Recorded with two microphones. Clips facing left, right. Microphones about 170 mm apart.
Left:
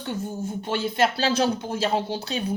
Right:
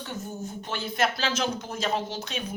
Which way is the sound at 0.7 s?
30° left (ahead or behind).